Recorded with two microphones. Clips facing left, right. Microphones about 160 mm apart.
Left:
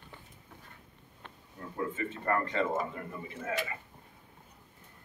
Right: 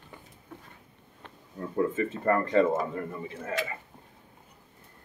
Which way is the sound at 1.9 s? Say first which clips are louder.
Right 6 dB; 35° right (ahead or behind).